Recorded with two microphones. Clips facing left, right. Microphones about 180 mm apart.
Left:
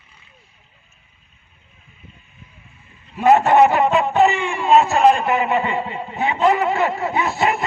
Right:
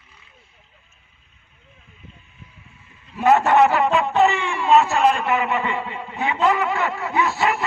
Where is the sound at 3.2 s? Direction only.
20° left (ahead or behind).